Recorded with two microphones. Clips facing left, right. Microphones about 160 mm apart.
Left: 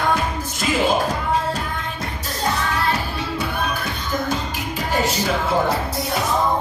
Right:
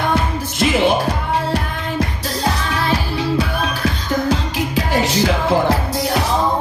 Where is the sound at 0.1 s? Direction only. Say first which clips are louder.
Right 3 dB; 70° right (ahead or behind).